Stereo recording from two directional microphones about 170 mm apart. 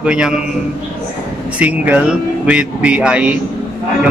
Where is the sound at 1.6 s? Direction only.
10° right (ahead or behind).